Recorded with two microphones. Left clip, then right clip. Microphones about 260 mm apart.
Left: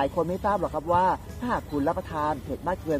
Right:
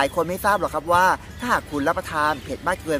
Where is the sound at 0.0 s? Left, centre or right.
Centre.